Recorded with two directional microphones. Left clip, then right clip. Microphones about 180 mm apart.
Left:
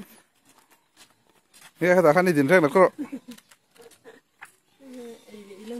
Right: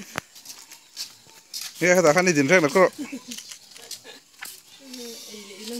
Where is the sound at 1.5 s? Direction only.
Centre (ahead or behind).